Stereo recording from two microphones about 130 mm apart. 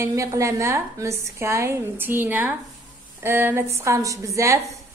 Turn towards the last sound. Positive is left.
turn(degrees=-20)  # may be behind; listen again after turning